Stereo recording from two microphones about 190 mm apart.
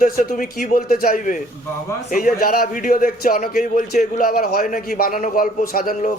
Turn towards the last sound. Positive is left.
turn(degrees=50)  # may be behind; listen again after turning